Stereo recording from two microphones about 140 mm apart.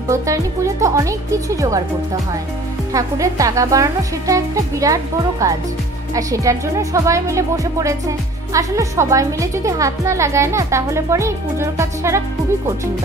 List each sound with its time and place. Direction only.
0.1 s a woman's voice: 25° right (ahead or behind)
2.9 s a woman's voice: 25° right (ahead or behind)